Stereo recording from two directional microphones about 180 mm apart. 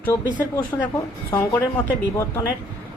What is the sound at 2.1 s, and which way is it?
Speech, 15° left (ahead or behind).